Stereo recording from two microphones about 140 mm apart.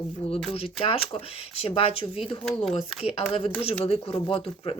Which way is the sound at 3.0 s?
45° left (ahead or behind).